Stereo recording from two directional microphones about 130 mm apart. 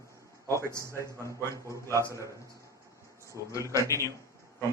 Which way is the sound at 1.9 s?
25° right (ahead or behind).